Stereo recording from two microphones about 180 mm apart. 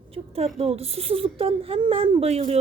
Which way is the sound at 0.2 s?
30° right (ahead or behind).